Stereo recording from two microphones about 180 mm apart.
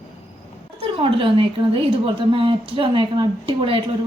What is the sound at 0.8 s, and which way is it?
A woman's voice, 30° right (ahead or behind).